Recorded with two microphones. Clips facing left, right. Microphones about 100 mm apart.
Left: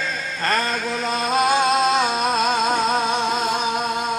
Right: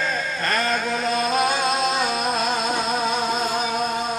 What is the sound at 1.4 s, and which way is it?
Music, 40° left (ahead or behind).